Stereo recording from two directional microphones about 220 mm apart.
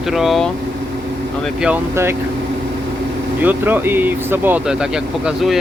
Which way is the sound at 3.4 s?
10° right (ahead or behind).